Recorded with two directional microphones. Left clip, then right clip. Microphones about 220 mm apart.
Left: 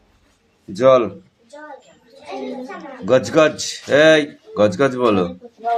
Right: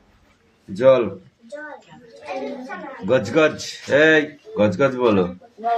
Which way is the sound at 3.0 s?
20° left (ahead or behind).